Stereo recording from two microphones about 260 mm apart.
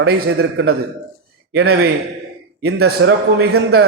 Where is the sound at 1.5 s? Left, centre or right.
Right.